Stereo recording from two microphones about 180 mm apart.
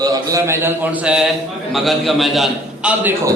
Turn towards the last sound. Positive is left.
turn(degrees=-5)  # may be behind; listen again after turning